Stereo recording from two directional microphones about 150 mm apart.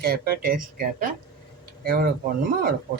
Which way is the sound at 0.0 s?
90° right.